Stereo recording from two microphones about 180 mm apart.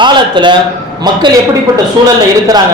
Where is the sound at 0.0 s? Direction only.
25° right (ahead or behind).